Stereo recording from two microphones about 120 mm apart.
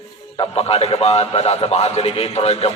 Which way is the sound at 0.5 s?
55° left (ahead or behind).